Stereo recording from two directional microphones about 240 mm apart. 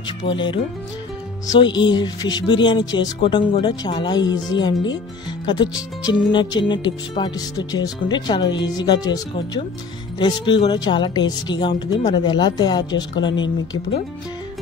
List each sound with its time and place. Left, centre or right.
0.2 s speech: left
1.8 s speech: centre